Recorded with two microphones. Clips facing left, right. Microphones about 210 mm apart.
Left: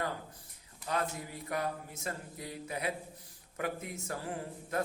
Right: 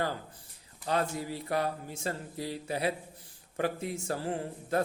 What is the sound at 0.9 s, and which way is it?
Speech, 30° right (ahead or behind).